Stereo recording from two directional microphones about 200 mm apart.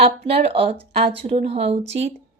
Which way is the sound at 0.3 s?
30° right (ahead or behind).